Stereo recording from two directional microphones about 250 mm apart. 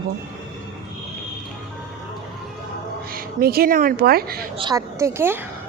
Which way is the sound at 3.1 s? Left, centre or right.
Right.